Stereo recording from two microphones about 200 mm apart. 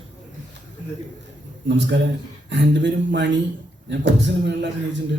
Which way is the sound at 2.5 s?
65° right (ahead or behind).